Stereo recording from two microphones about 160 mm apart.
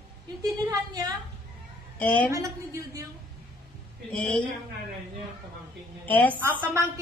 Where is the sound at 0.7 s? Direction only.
20° right (ahead or behind).